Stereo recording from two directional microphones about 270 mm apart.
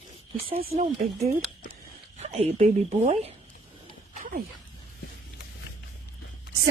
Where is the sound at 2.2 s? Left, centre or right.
Right.